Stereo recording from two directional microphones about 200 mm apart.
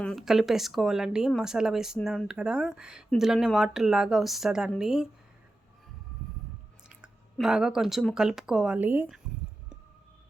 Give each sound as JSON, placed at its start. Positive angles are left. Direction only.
{"t": 0.0, "sound": "speech", "side_deg": 0}
{"t": 6.8, "sound": "speech", "side_deg": -5}